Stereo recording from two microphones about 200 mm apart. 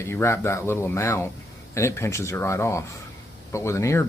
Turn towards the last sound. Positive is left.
turn(degrees=15)  # may be behind; listen again after turning